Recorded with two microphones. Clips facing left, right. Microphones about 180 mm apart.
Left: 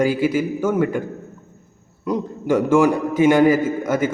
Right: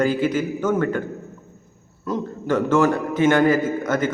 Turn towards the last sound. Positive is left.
turn(degrees=10)  # may be behind; listen again after turning